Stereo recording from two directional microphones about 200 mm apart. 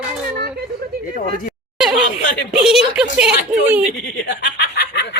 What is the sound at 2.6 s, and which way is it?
A woman's voice, 5° right (ahead or behind).